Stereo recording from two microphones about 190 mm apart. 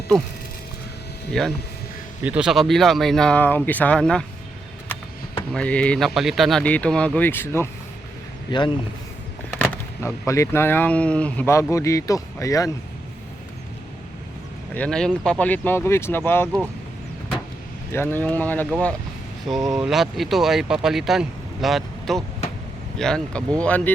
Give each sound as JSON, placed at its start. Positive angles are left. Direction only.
{"t": 1.3, "sound": "speech", "side_deg": 0}
{"t": 5.5, "sound": "speech", "side_deg": 5}
{"t": 8.4, "sound": "speech", "side_deg": 25}
{"t": 9.6, "sound": "speech", "side_deg": 10}
{"t": 14.8, "sound": "speech", "side_deg": 5}
{"t": 17.9, "sound": "speech", "side_deg": 10}